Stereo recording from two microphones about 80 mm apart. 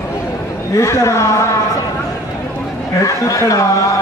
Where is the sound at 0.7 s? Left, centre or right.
Left.